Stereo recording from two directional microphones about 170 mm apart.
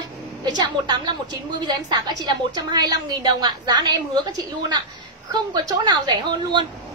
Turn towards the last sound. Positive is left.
turn(degrees=-25)  # may be behind; listen again after turning